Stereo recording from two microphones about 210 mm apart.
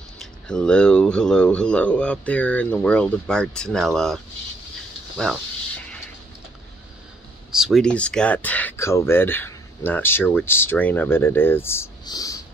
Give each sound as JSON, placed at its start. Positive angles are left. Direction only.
{"t": 0.2, "sound": "speech", "side_deg": 5}
{"t": 5.1, "sound": "a sound", "side_deg": 0}
{"t": 7.5, "sound": "speech", "side_deg": 0}